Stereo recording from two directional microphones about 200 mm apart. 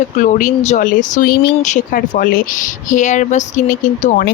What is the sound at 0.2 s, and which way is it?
Speech, 40° left (ahead or behind).